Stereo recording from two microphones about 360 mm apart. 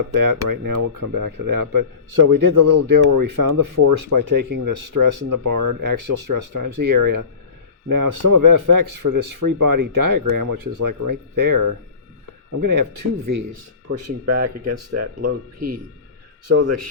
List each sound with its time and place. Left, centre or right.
0.1 s speech: right
13.8 s speech: right